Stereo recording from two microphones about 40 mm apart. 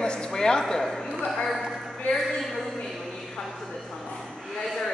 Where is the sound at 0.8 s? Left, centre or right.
Centre.